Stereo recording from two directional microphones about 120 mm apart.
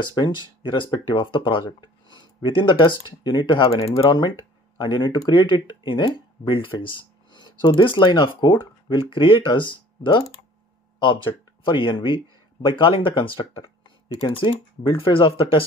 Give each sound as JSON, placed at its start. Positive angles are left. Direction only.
{"t": 0.1, "sound": "speech", "side_deg": 40}